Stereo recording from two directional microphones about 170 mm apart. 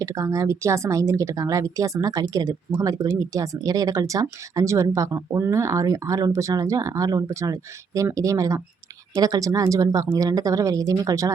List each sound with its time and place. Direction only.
0.0 s speech: 20° right (ahead or behind)